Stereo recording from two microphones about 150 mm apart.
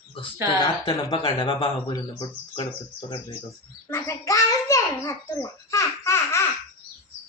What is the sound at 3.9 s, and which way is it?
A child's voice, 20° left (ahead or behind).